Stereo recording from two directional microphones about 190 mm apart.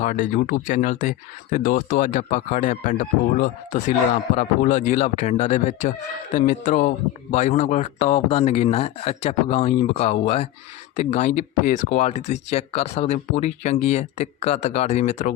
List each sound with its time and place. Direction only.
0.0 s speech: 45° left (ahead or behind)